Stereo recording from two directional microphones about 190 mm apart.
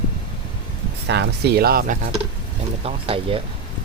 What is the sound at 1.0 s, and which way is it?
Speech, 65° right (ahead or behind).